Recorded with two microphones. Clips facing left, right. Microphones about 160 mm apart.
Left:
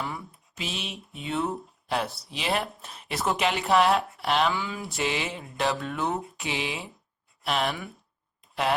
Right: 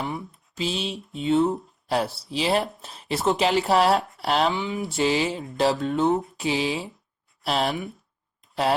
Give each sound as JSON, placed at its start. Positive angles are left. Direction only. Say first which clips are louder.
{"t": 0.0, "sound": "speech", "louder": "right 4 dB", "side_deg": -25}
{"t": 4.5, "sound": "speech", "louder": "right 5 dB", "side_deg": -20}